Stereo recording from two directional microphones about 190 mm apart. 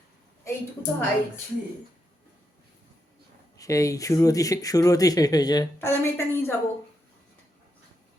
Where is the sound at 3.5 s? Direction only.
15° left (ahead or behind).